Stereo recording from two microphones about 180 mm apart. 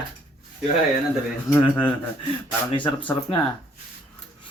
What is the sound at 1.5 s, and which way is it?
Speech, 10° left (ahead or behind).